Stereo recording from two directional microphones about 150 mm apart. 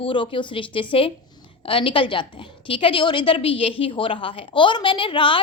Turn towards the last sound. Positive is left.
turn(degrees=35)  # may be behind; listen again after turning